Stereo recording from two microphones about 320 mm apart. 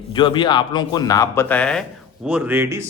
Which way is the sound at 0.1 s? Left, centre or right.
Centre.